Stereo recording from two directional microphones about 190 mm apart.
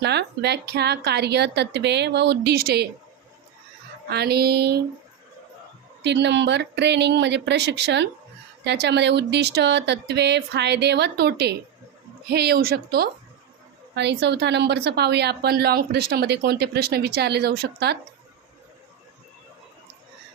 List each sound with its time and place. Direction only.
0.0 s a woman's voice: 60° right (ahead or behind)
4.1 s a woman's voice: 55° right (ahead or behind)
6.0 s a woman's voice: 65° right (ahead or behind)